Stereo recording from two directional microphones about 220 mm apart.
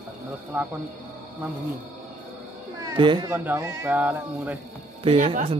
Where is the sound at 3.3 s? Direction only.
10° right (ahead or behind).